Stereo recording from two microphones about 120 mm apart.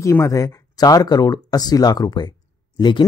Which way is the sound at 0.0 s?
25° left (ahead or behind).